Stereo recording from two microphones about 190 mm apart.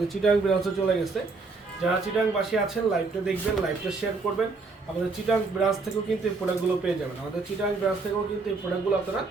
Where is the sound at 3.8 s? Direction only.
5° right (ahead or behind).